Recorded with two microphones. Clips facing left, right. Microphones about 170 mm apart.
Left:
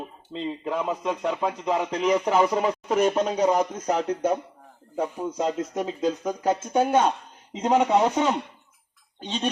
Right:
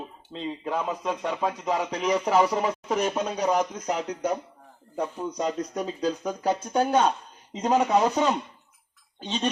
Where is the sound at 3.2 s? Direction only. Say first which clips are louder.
Left 3 dB; 20° left (ahead or behind).